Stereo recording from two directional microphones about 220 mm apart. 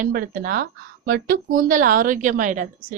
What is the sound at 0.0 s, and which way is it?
Speech, 40° right (ahead or behind).